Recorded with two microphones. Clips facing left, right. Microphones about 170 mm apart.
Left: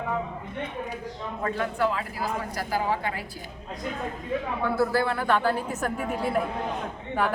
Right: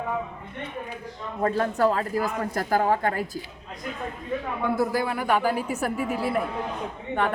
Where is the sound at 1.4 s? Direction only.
40° right (ahead or behind).